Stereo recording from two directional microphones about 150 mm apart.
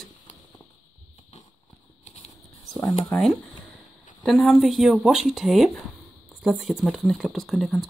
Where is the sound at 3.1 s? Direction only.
Centre (ahead or behind).